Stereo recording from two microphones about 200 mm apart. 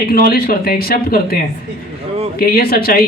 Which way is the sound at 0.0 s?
50° left (ahead or behind).